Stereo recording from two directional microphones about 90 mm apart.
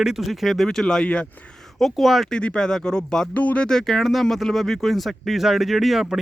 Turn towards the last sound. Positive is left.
turn(degrees=-5)  # may be behind; listen again after turning